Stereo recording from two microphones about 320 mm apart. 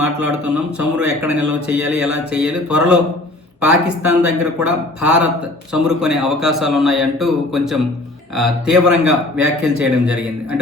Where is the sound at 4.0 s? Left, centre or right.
Right.